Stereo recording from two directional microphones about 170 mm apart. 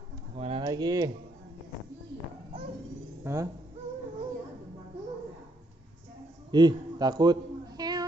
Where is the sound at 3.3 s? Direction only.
15° right (ahead or behind).